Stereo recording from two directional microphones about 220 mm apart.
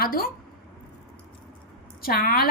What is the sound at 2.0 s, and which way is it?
Speech, 40° left (ahead or behind).